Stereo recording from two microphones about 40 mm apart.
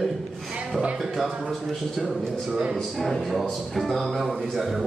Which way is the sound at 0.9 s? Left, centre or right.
Centre.